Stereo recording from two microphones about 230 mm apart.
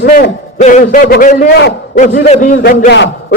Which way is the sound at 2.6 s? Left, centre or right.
Left.